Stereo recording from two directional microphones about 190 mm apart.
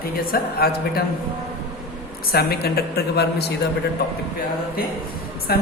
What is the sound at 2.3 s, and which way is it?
A woman's voice, 55° left (ahead or behind).